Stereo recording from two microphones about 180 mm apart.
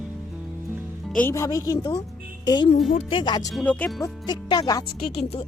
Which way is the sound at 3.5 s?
5° left (ahead or behind).